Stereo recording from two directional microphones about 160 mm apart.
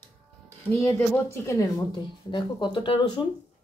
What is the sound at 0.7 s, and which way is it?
Speech, 15° left (ahead or behind).